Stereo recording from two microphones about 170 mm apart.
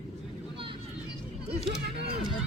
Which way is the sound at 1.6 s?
75° right (ahead or behind).